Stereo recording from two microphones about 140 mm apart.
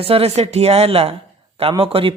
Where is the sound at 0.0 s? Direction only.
45° right (ahead or behind).